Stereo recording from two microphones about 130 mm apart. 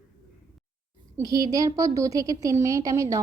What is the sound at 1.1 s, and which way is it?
A woman's voice, 25° right (ahead or behind).